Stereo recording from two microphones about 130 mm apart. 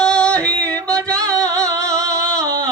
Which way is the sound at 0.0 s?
5° left (ahead or behind).